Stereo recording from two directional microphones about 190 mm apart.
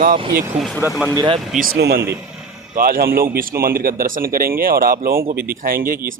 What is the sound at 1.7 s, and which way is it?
Speech, 60° right (ahead or behind).